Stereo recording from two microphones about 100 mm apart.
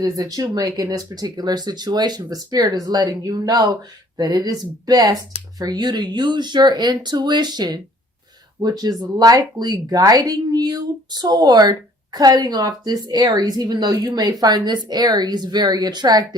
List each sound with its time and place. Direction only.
0.0 s speech: 35° right (ahead or behind)